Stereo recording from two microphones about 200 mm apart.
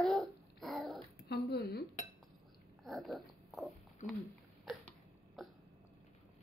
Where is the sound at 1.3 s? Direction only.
55° left (ahead or behind).